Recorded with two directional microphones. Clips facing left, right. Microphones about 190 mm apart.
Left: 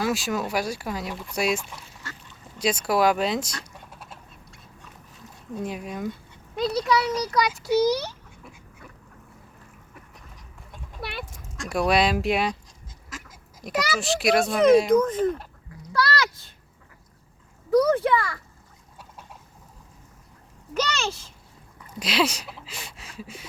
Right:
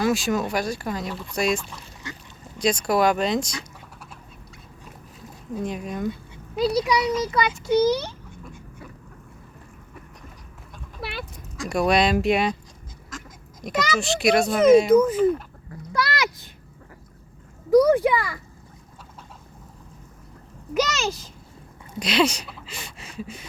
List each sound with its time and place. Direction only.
0.0 s speech: 5° left (ahead or behind)
2.0 s duck: 15° right (ahead or behind)
2.6 s speech: 5° left (ahead or behind)
5.6 s speech: 5° left (ahead or behind)
6.6 s a child's voice: 10° right (ahead or behind)
7.0 s a child's voice: centre (ahead or behind)
11.0 s a sound: centre (ahead or behind)
11.5 s speech: centre (ahead or behind)
15.9 s a sound: 20° right (ahead or behind)
17.7 s a child's voice: 15° right (ahead or behind)
21.9 s speech: 5° left (ahead or behind)